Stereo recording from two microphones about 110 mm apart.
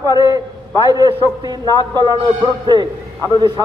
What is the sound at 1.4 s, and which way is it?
Speech, 40° right (ahead or behind).